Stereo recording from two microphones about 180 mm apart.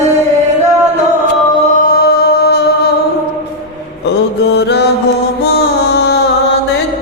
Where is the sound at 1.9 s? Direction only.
60° left (ahead or behind).